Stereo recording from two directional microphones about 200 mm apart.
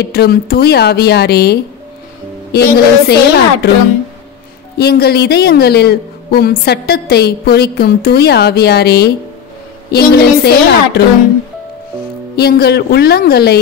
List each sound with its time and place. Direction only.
0.0 s a man's voice: 50° left (ahead or behind)
4.7 s a man's voice: 50° left (ahead or behind)
12.4 s a man's voice: 55° left (ahead or behind)